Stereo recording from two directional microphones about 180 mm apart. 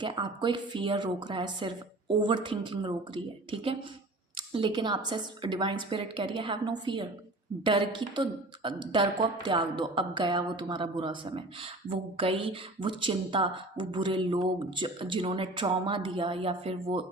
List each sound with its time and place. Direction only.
0.0 s speech: 25° right (ahead or behind)